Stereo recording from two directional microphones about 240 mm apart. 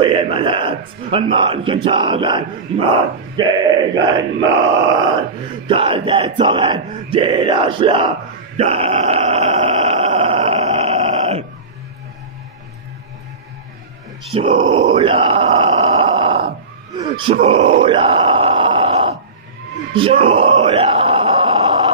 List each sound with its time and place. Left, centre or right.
0.0 s a man's voice: right
8.5 s a sound: right
14.3 s a man's voice: right
14.6 s grunt: right
17.0 s groan: right
19.9 s a sound: right